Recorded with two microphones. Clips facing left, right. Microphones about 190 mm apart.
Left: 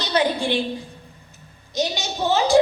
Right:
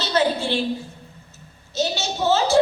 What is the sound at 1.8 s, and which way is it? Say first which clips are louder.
Speech: even; 15° left (ahead or behind).